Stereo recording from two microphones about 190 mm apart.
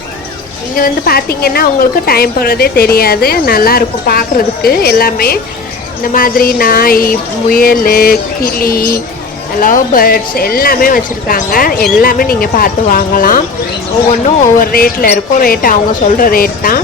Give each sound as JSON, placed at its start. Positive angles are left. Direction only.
{"t": 0.8, "sound": "a woman's voice", "side_deg": 50}
{"t": 14.6, "sound": "a woman's voice", "side_deg": 50}